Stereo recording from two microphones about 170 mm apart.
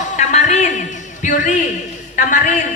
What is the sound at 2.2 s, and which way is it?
Speech, 50° left (ahead or behind).